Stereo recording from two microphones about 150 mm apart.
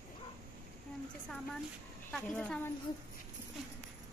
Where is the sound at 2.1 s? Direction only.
10° left (ahead or behind).